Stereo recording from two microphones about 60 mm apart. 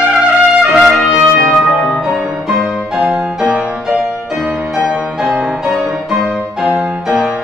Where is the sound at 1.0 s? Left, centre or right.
Centre.